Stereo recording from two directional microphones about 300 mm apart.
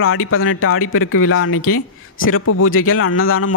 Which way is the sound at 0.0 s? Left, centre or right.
Left.